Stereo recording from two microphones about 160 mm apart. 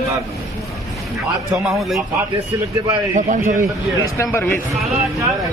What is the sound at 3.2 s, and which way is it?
Speech, 50° right (ahead or behind).